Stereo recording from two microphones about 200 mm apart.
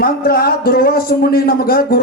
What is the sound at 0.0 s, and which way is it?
A man's voice, 50° left (ahead or behind).